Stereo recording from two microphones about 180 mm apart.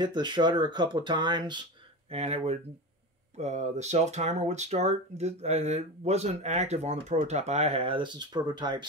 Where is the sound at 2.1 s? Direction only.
35° right (ahead or behind).